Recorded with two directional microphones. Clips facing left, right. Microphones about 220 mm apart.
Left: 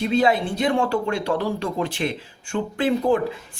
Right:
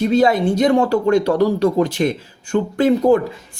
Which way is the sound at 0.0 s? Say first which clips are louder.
Right 5 dB; 45° right (ahead or behind).